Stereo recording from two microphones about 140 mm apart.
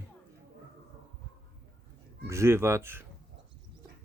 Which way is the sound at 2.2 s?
20° right (ahead or behind).